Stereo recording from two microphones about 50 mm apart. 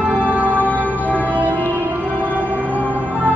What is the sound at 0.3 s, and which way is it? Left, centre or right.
Music, right.